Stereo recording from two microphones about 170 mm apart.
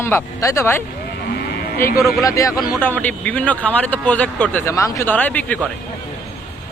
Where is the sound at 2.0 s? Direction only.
20° left (ahead or behind).